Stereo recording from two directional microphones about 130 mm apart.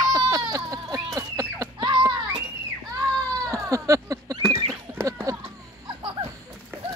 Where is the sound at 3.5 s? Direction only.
25° right (ahead or behind).